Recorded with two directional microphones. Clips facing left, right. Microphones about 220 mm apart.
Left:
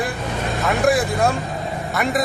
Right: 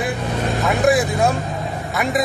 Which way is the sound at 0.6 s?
Centre (ahead or behind).